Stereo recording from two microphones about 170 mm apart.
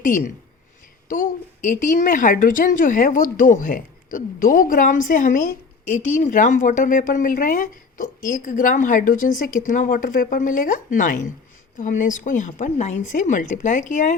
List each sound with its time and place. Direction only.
0.0 s speech: 50° left (ahead or behind)